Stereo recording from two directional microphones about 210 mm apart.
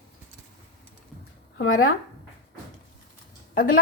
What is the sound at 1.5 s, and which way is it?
Speech, 90° left.